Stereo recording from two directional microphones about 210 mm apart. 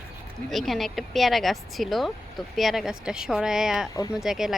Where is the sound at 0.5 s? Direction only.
Centre (ahead or behind).